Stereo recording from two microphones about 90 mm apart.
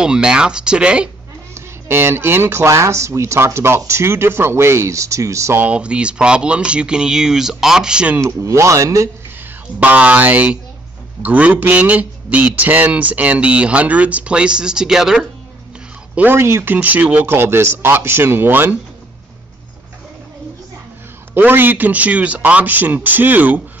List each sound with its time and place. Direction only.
0.0 s speech: 10° right (ahead or behind)
1.5 s speech: 25° right (ahead or behind)
5.6 s speech: 15° right (ahead or behind)
8.2 s speech: 30° right (ahead or behind)
9.8 s speech: 15° right (ahead or behind)
16.2 s speech: 25° right (ahead or behind)
16.7 s speech: 15° right (ahead or behind)
21.3 s speech: 25° right (ahead or behind)